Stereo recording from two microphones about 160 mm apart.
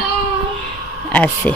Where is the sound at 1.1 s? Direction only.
10° left (ahead or behind).